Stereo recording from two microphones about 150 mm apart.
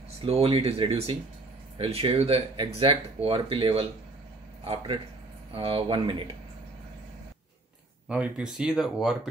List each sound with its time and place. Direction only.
0.2 s speech: 40° right (ahead or behind)
8.1 s speech: 5° right (ahead or behind)